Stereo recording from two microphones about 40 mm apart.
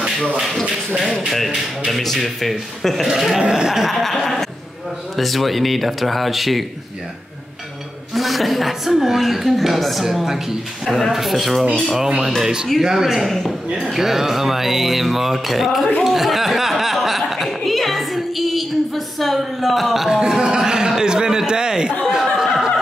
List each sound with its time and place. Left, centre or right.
1.3 s a woman's voice: centre
3.3 s speech: centre
3.7 s a woman's voice: centre
8.1 s a woman's voice: centre
12.4 s speech: centre
13.2 s speech: centre
13.9 s speech: centre
16.0 s a sound: centre
20.2 s speech: centre
22.1 s laughter: centre